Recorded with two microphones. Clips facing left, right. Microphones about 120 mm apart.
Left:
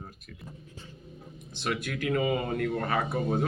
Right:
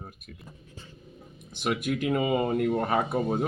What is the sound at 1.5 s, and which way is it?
Speech, 15° right (ahead or behind).